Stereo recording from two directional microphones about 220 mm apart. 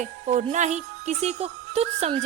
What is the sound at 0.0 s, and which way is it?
A woman's voice, 30° right (ahead or behind).